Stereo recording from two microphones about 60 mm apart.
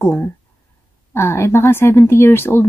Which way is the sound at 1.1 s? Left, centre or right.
Left.